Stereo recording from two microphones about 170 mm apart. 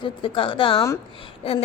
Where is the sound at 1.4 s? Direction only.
35° left (ahead or behind).